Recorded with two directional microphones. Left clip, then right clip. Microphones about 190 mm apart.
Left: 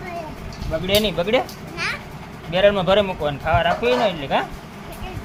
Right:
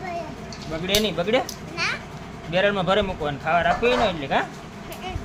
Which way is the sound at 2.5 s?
25° left (ahead or behind).